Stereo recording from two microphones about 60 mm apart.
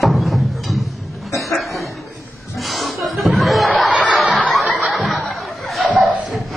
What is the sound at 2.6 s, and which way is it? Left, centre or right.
Music, centre.